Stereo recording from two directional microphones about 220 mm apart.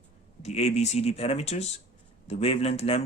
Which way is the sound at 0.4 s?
30° left (ahead or behind).